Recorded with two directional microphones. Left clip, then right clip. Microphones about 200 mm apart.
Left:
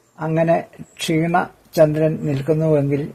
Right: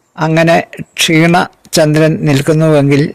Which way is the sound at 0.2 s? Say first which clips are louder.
Right 8 dB; 45° right (ahead or behind).